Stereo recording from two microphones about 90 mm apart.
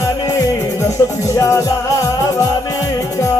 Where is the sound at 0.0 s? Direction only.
40° left (ahead or behind).